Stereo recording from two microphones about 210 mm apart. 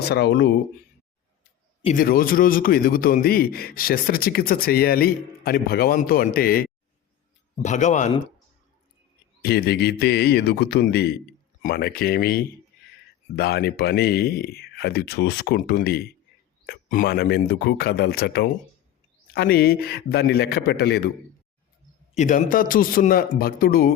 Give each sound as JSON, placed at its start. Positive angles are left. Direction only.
{"t": 0.0, "sound": "a man's voice", "side_deg": 50}
{"t": 1.8, "sound": "a man's voice", "side_deg": 40}
{"t": 9.4, "sound": "a man's voice", "side_deg": 50}
{"t": 22.1, "sound": "a man's voice", "side_deg": 35}